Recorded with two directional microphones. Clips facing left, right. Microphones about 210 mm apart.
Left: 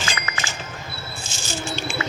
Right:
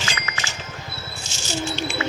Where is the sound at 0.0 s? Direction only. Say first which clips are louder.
Left 1 dB; 50° left (ahead or behind).